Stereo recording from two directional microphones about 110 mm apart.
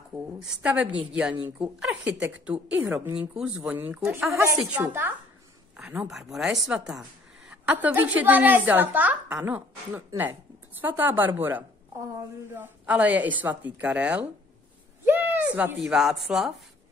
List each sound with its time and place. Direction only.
0.1 s speech: 5° right (ahead or behind)
5.8 s speech: 5° right (ahead or behind)
15.0 s a sound: 15° right (ahead or behind)
15.8 s speech: 5° right (ahead or behind)